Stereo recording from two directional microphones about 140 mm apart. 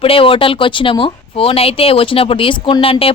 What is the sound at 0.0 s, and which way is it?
Speech, 40° left (ahead or behind).